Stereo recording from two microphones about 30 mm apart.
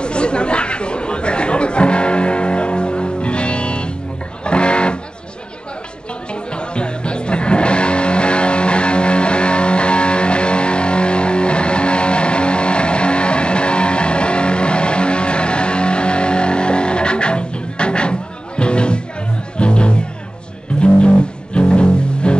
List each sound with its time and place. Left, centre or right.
0.0 s chatter: left
4.5 s music: left
6.5 s music: left
21.5 s music: left